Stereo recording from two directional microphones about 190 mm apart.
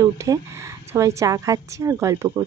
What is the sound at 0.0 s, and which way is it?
A woman's voice, 15° right (ahead or behind).